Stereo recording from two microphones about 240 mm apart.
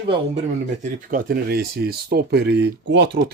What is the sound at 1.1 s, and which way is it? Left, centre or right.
Speech, right.